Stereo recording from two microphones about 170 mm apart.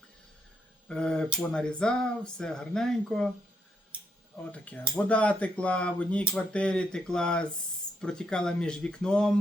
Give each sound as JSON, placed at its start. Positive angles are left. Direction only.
{"t": 0.9, "sound": "speech", "side_deg": 5}
{"t": 4.6, "sound": "speech", "side_deg": 10}